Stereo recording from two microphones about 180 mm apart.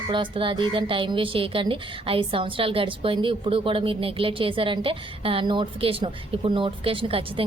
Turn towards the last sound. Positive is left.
turn(degrees=-30)  # may be behind; listen again after turning